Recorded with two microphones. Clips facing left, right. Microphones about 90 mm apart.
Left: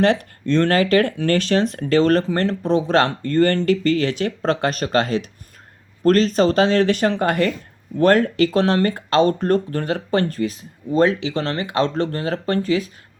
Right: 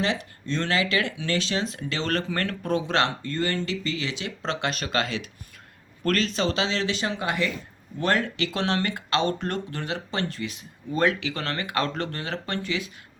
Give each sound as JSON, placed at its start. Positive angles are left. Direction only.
{"t": 0.0, "sound": "speech", "side_deg": 55}